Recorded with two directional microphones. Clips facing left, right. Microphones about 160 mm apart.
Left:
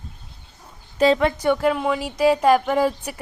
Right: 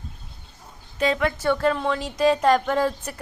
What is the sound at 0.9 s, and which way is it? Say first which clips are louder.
Speech: left 5 dB; 30° left (ahead or behind).